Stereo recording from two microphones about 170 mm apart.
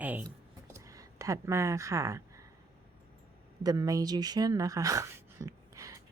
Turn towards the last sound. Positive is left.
turn(degrees=-20)  # may be behind; listen again after turning